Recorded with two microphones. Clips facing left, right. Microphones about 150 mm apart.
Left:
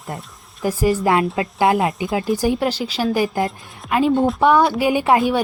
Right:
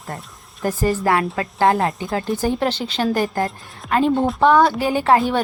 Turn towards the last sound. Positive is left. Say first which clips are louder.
# even
turn(degrees=15)  # may be behind; listen again after turning